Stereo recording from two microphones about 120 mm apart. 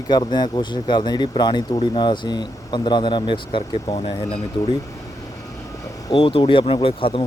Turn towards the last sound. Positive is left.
turn(degrees=50)  # may be behind; listen again after turning